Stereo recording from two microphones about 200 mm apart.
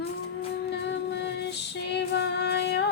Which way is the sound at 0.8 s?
60° left (ahead or behind).